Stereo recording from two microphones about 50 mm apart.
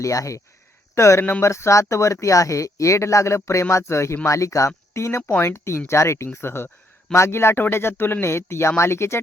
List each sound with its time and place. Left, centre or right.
0.0 s speech: left
0.9 s speech: left
4.3 s speech: left
6.3 s speech: left